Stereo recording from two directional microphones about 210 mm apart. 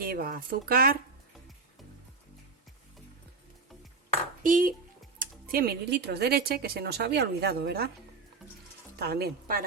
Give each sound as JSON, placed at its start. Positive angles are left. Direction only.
{"t": 0.0, "sound": "speech", "side_deg": -45}
{"t": 4.4, "sound": "speech", "side_deg": -40}
{"t": 9.0, "sound": "speech", "side_deg": -50}